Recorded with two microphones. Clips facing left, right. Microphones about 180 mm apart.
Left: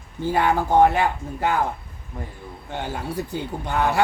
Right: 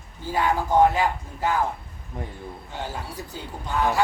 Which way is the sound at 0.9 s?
60° left (ahead or behind).